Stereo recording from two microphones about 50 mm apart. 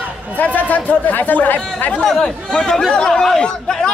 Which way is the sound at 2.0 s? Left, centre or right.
Centre.